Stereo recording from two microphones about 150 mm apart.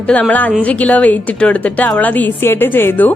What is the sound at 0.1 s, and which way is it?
A woman's voice, 10° left (ahead or behind).